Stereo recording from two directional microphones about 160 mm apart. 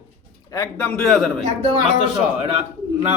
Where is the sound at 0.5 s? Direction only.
15° left (ahead or behind).